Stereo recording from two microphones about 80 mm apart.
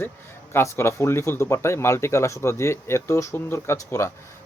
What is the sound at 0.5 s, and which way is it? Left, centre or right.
Speech, left.